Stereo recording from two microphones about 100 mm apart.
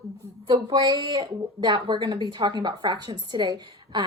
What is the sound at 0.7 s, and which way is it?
A woman's voice, 45° right (ahead or behind).